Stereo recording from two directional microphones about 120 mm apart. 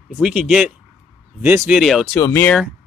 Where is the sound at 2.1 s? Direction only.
25° left (ahead or behind).